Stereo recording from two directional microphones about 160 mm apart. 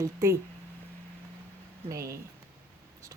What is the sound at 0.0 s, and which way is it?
Speech, 20° right (ahead or behind).